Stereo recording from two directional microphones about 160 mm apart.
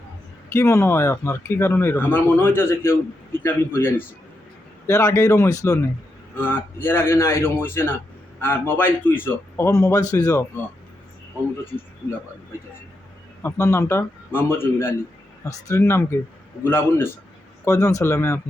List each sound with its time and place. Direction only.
0.5 s speech: 15° left (ahead or behind)
13.4 s speech: 15° left (ahead or behind)